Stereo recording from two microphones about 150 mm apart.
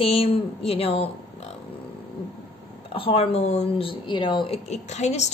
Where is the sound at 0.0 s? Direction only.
40° left (ahead or behind).